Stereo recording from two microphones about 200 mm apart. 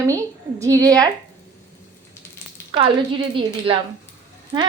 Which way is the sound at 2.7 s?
25° right (ahead or behind).